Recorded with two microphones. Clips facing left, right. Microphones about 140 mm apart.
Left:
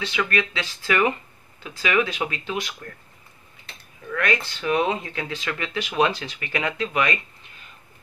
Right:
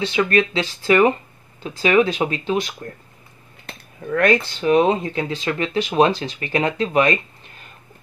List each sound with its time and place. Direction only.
0.0 s speech: 30° right (ahead or behind)
3.6 s a sound: 45° right (ahead or behind)
4.6 s speech: 30° right (ahead or behind)